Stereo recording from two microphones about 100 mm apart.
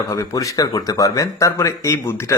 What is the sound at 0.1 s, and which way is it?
Speech, 35° left (ahead or behind).